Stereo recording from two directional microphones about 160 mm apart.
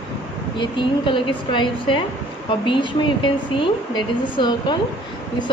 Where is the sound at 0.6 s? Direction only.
30° left (ahead or behind).